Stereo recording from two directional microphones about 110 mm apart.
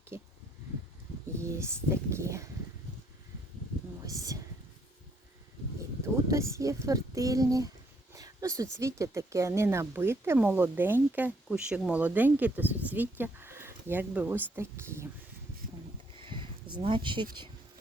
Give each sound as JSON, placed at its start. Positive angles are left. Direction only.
{"t": 0.1, "sound": "speech", "side_deg": -25}
{"t": 1.4, "sound": "speech", "side_deg": -25}
{"t": 4.0, "sound": "speech", "side_deg": -30}
{"t": 6.2, "sound": "speech", "side_deg": -25}
{"t": 11.4, "sound": "speech", "side_deg": -5}
{"t": 16.1, "sound": "a sound", "side_deg": -50}